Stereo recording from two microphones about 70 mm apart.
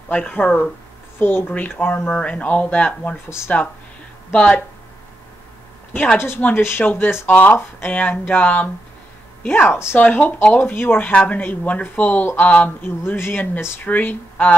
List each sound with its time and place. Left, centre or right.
0.1 s speech: left
2.0 s speech: centre
3.3 s speech: left
4.3 s speech: centre
6.1 s speech: left
7.2 s speech: left